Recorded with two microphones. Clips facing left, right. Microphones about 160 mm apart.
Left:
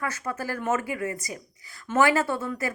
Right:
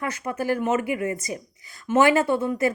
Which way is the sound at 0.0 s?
20° right (ahead or behind).